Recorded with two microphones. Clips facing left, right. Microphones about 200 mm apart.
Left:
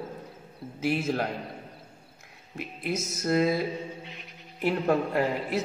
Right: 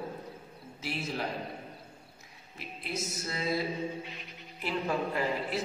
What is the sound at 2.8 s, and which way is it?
Speech, 50° left (ahead or behind).